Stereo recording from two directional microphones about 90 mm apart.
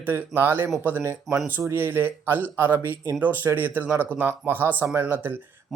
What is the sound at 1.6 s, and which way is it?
Speech, 25° right (ahead or behind).